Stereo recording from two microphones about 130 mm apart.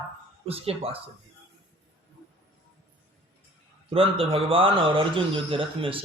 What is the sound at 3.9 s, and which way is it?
A man's voice, 45° right (ahead or behind).